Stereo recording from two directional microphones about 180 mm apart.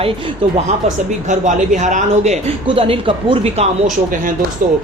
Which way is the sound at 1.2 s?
45° right (ahead or behind).